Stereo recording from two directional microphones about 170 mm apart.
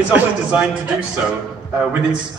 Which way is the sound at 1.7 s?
10° right (ahead or behind).